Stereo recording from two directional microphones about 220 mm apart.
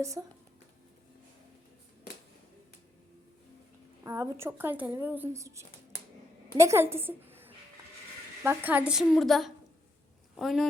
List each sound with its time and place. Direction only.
0.0 s speech: 15° right (ahead or behind)
4.0 s a woman's voice: 15° right (ahead or behind)